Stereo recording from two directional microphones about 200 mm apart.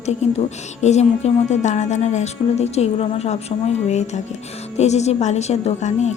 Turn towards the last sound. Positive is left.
turn(degrees=35)  # may be behind; listen again after turning